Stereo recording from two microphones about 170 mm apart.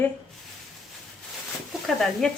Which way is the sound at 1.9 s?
Centre (ahead or behind).